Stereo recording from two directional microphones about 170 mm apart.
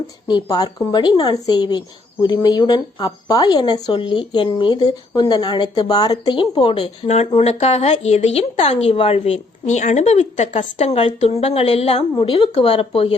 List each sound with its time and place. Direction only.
0.3 s speech: 25° left (ahead or behind)